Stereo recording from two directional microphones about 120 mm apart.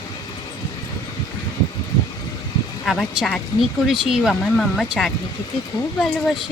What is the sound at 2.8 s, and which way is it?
Speech, centre (ahead or behind).